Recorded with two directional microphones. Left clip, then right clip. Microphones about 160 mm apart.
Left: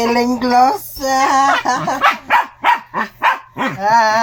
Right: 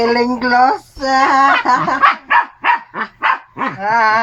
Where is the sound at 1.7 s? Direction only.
35° left (ahead or behind).